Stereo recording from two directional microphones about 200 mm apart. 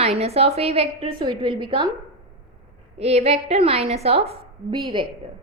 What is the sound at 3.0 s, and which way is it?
A woman's voice, 30° right (ahead or behind).